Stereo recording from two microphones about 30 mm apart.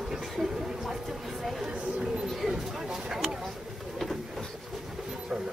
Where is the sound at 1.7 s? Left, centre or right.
Right.